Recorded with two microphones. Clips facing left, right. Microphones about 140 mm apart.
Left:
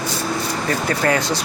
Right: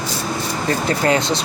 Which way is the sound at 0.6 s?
25° right (ahead or behind).